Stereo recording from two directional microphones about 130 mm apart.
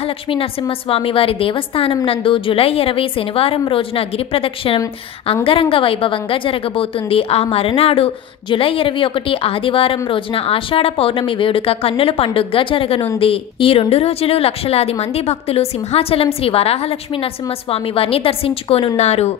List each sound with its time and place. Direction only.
0.0 s a woman's voice: 45° left (ahead or behind)